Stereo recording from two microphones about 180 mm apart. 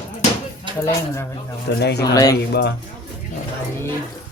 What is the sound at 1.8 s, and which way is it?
Speech, 65° left (ahead or behind).